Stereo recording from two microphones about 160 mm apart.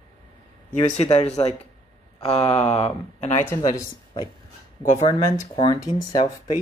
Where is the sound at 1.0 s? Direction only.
40° left (ahead or behind).